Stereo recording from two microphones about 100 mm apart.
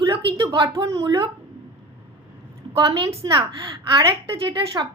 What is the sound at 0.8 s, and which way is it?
Speech, 35° right (ahead or behind).